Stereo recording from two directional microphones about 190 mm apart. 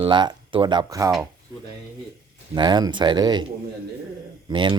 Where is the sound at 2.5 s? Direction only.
20° right (ahead or behind).